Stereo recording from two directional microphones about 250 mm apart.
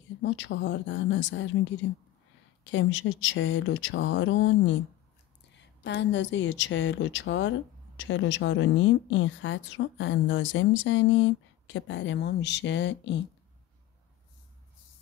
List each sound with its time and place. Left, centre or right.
0.2 s a woman's voice: left